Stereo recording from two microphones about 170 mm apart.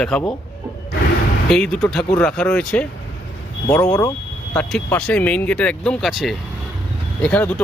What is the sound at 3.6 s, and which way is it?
Speech, 20° left (ahead or behind).